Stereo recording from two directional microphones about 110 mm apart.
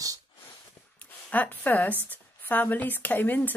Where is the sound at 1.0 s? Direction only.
15° left (ahead or behind).